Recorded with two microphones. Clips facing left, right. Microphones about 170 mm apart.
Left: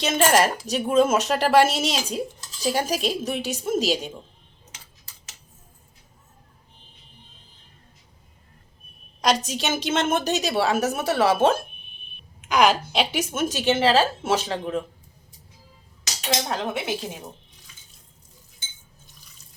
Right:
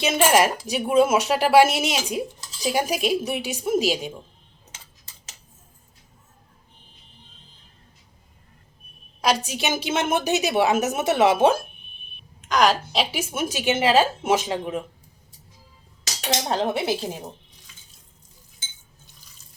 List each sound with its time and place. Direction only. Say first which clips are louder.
0.0 s speech: right 1 dB; 10° right (ahead or behind)
9.5 s speech: even; 10° right (ahead or behind)
12.4 s speech: left 1 dB; 10° left (ahead or behind); by 14.8 s 10° right (ahead or behind)
16.5 s speech: right 4 dB; 35° right (ahead or behind)